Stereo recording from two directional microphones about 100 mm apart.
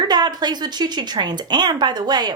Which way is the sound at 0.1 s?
45° right (ahead or behind).